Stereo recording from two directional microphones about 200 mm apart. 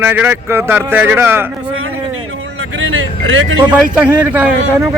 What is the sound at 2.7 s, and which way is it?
Vehicle, 80° right.